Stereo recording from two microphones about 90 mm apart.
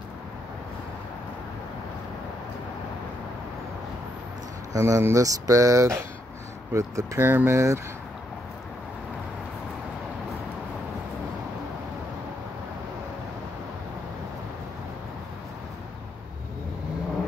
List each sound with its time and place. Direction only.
4.7 s speech: 35° right (ahead or behind)